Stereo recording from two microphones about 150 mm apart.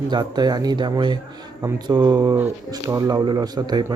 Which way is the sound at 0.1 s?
30° right (ahead or behind).